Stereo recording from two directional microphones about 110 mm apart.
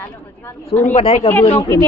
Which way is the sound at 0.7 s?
80° left.